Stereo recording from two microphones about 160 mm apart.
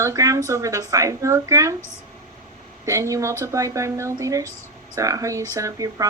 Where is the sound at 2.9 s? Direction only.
20° right (ahead or behind).